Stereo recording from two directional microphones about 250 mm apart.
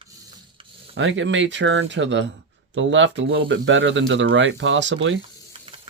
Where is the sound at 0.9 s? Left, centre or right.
Right.